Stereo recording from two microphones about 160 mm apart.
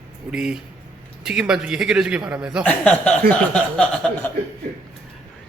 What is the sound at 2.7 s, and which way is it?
Speech, 10° left (ahead or behind).